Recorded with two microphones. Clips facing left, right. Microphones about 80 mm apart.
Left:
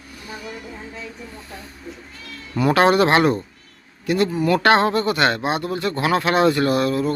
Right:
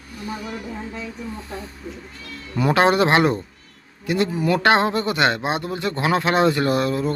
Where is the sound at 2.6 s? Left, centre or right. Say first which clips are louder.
Left 1 dB; right.